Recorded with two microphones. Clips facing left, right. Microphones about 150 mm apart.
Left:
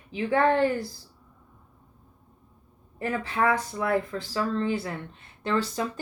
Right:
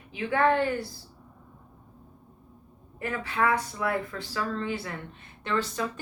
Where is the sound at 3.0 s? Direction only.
35° left (ahead or behind).